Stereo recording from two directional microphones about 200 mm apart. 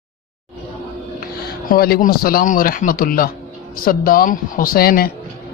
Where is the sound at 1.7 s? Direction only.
45° left (ahead or behind).